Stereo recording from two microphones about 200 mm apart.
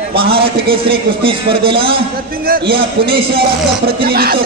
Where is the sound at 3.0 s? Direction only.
25° right (ahead or behind).